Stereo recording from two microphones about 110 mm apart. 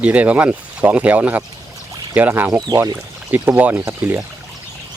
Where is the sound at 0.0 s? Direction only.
15° right (ahead or behind).